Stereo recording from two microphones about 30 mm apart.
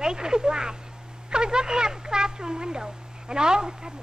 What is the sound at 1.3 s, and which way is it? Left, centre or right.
Speech, right.